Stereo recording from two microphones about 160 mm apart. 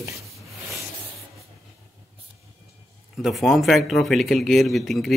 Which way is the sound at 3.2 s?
Centre (ahead or behind).